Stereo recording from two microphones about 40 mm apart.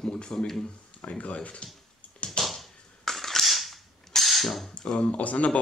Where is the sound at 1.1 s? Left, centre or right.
Left.